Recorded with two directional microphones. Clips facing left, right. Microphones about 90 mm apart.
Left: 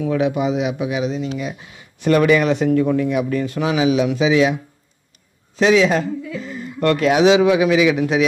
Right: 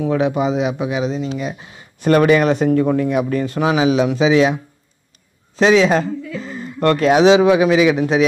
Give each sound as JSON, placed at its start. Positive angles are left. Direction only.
{"t": 0.0, "sound": "speech", "side_deg": -35}
{"t": 5.6, "sound": "speech", "side_deg": -35}